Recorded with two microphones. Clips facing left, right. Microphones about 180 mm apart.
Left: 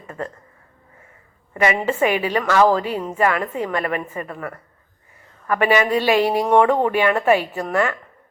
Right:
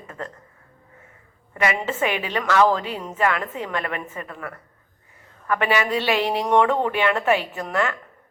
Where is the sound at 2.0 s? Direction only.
45° left (ahead or behind).